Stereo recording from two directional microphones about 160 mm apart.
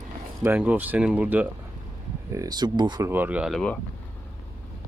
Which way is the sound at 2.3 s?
20° right (ahead or behind).